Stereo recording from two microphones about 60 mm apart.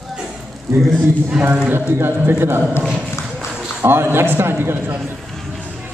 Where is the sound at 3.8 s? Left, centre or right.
Right.